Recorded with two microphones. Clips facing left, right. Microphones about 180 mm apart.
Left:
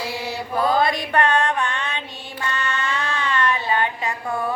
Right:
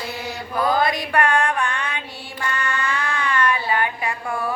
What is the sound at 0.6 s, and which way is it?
Mantra, 25° left (ahead or behind).